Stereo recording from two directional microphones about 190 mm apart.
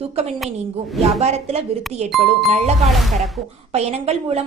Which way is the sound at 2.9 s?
Centre (ahead or behind).